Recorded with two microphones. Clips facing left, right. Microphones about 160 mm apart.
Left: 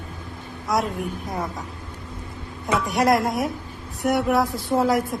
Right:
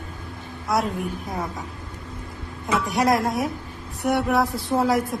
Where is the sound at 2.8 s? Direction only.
Centre (ahead or behind).